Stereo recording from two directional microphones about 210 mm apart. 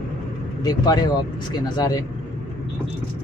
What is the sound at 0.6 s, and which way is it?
Speech, 20° left (ahead or behind).